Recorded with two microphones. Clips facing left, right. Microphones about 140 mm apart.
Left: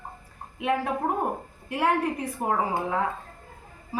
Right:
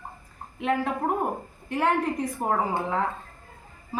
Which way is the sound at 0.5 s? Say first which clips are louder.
Even; 5° left (ahead or behind).